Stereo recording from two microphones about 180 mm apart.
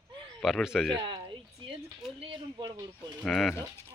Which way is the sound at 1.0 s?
25° right (ahead or behind).